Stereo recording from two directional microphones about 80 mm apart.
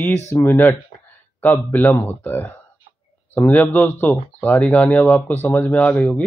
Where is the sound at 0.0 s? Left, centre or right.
Left.